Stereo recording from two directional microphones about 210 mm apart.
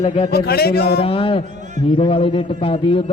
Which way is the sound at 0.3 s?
50° left (ahead or behind).